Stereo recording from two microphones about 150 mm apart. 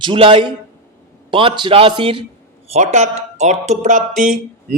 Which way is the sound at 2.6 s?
45° right (ahead or behind).